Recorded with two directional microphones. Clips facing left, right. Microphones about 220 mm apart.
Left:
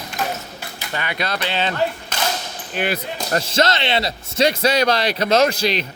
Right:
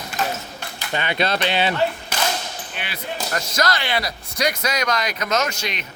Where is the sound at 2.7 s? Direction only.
45° left (ahead or behind).